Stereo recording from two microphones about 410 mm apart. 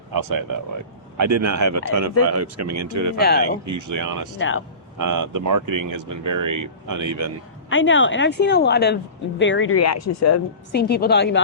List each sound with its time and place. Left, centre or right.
0.1 s speech: right
1.1 s speech: right
3.2 s speech: left
3.7 s speech: right
4.4 s speech: left
4.9 s speech: right
7.7 s speech: left
10.7 s speech: left